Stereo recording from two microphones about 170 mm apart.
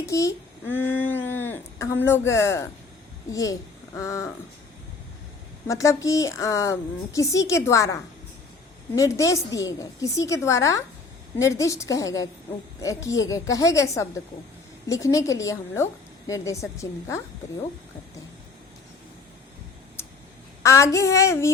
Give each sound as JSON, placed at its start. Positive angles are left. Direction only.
{"t": 0.0, "sound": "a child's voice", "side_deg": 20}
{"t": 5.6, "sound": "a woman's voice", "side_deg": 20}
{"t": 20.6, "sound": "a sound", "side_deg": 15}